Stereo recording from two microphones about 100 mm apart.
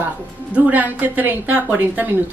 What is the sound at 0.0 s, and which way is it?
A woman's voice, 15° right (ahead or behind).